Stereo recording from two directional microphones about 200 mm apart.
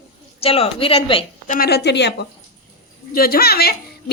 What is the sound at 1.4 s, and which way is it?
A woman's voice, 45° left (ahead or behind).